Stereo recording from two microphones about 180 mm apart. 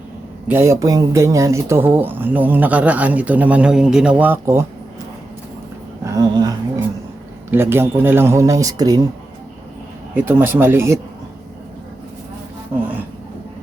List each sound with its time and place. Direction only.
0.4 s speech: 15° right (ahead or behind)
6.1 s speech: 20° right (ahead or behind)
10.2 s speech: 10° right (ahead or behind)